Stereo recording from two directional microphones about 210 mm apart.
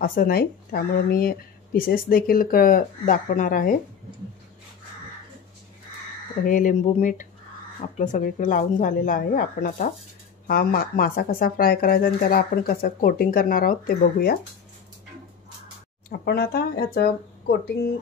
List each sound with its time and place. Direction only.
0.0 s speech: 45° left (ahead or behind)
6.4 s a woman's voice: 40° left (ahead or behind)
16.1 s speech: 50° left (ahead or behind)